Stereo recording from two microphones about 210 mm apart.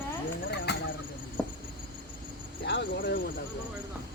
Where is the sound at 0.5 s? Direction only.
50° left (ahead or behind).